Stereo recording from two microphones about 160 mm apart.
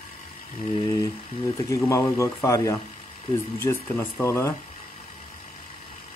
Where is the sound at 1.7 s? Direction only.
20° left (ahead or behind).